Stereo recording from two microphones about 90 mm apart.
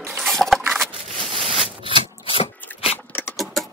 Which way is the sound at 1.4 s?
75° right (ahead or behind).